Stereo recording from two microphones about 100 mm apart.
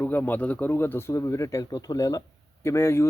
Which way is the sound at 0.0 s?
20° left (ahead or behind).